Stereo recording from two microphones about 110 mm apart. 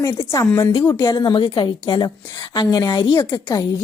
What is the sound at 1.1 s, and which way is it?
A woman's voice, 40° left (ahead or behind).